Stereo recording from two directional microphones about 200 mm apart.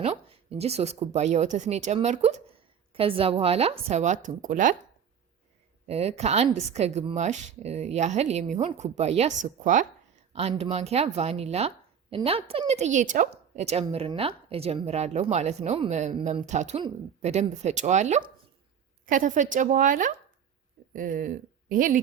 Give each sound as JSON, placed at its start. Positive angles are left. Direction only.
{"t": 0.0, "sound": "speech", "side_deg": -30}
{"t": 5.8, "sound": "speech", "side_deg": -30}